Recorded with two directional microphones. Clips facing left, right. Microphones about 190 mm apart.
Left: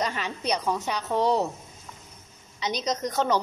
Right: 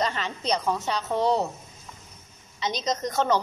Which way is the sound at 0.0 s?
15° left (ahead or behind).